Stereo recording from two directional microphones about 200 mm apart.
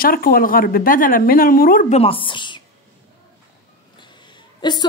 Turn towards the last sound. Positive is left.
turn(degrees=20)  # may be behind; listen again after turning